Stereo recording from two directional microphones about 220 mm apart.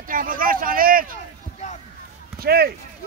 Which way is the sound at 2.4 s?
45° right (ahead or behind).